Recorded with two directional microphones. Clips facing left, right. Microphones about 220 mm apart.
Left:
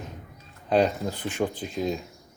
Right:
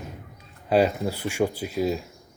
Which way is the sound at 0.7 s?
5° right (ahead or behind).